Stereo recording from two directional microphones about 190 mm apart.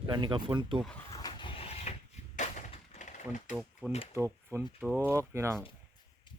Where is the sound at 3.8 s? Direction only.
15° right (ahead or behind).